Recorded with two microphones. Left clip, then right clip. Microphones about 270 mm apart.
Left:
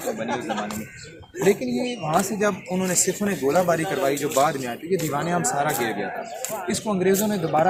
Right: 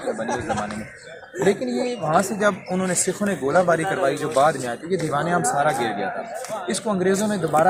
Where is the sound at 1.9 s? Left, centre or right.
Centre.